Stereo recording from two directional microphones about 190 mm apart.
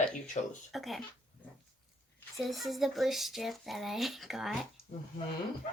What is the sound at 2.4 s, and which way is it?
Speech, centre (ahead or behind).